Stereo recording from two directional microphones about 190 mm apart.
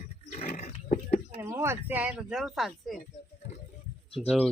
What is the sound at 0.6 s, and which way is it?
Pig, 35° left (ahead or behind).